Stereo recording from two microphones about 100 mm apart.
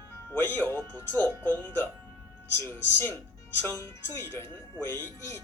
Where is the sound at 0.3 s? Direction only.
20° left (ahead or behind).